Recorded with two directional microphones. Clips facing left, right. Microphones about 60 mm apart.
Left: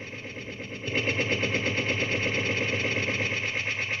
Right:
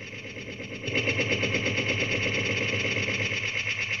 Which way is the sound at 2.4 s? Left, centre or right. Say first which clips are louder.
Left 1 dB; left.